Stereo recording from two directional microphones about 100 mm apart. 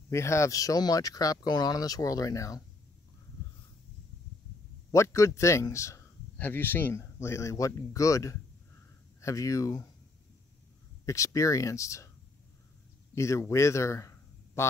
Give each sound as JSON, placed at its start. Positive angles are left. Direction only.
{"t": 0.1, "sound": "speech", "side_deg": 30}
{"t": 4.9, "sound": "speech", "side_deg": 30}
{"t": 6.3, "sound": "speech", "side_deg": 20}
{"t": 11.1, "sound": "speech", "side_deg": 30}
{"t": 13.1, "sound": "speech", "side_deg": 30}